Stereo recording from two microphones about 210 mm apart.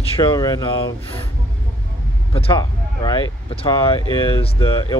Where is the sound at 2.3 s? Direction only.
25° left (ahead or behind).